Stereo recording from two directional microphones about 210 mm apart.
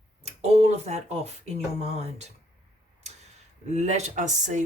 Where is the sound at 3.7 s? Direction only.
35° right (ahead or behind).